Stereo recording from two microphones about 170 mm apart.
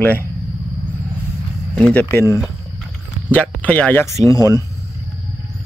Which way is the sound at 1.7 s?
5° left (ahead or behind).